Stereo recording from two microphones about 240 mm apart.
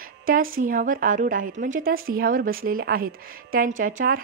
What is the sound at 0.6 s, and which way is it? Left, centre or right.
A woman's voice, right.